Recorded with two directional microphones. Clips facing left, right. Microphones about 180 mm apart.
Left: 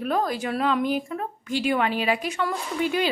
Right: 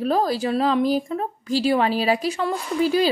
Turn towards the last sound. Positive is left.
turn(degrees=-35)  # may be behind; listen again after turning